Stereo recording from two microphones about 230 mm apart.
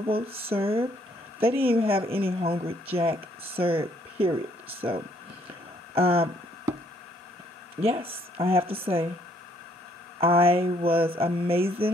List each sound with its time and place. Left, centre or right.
0.0 s speech: right
7.8 s speech: right
10.2 s speech: right